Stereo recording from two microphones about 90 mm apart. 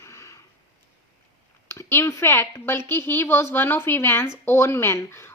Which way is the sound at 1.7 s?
30° left (ahead or behind).